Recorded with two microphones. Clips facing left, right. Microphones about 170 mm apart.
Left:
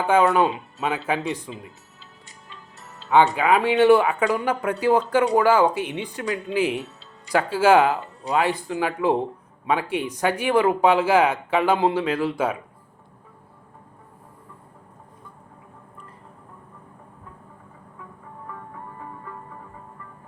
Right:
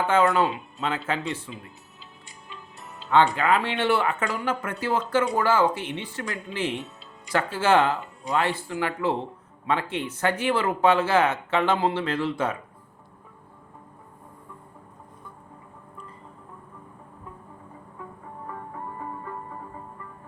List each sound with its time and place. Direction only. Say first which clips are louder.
0.0 s speech: left 3 dB; 10° left (ahead or behind)
2.5 s music: right 2 dB; 15° right (ahead or behind)
3.3 s speech: left 5 dB; 10° left (ahead or behind)
18.5 s music: right 1 dB; 40° right (ahead or behind)